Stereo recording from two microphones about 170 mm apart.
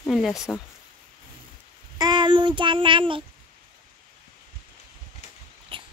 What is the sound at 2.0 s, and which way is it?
Child singing, 25° right (ahead or behind).